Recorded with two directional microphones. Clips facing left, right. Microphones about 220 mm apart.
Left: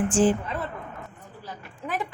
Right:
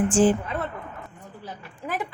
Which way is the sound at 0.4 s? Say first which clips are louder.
Right 2 dB; centre (ahead or behind).